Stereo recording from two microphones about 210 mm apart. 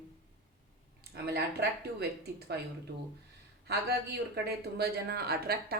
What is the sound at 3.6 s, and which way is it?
Speech, 50° right (ahead or behind).